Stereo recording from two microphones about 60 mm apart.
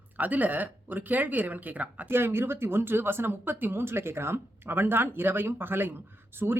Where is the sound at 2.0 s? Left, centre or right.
Right.